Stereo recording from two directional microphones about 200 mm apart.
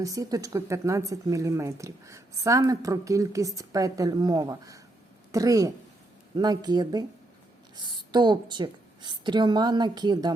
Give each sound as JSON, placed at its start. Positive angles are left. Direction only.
{"t": 0.0, "sound": "a woman's voice", "side_deg": -15}